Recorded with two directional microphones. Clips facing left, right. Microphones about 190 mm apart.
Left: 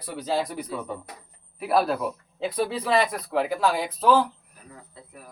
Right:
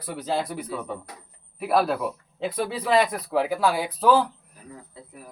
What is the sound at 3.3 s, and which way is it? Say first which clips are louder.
Speech: right 1 dB; 10° right (ahead or behind).